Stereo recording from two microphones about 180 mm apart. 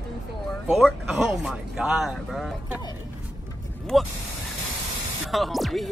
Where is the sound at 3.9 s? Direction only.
Centre (ahead or behind).